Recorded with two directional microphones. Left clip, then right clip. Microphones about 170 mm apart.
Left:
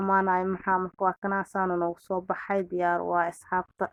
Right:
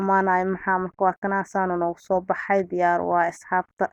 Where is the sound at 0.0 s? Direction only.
30° right (ahead or behind).